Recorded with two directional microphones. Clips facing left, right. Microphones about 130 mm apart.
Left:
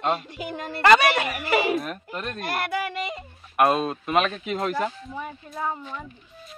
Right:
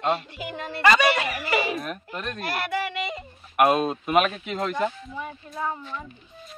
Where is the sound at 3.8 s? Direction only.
20° right (ahead or behind).